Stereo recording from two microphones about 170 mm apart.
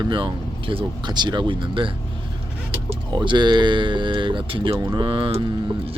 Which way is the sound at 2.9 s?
30° right (ahead or behind).